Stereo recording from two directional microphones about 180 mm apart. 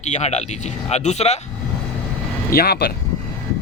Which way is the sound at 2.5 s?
60° left (ahead or behind).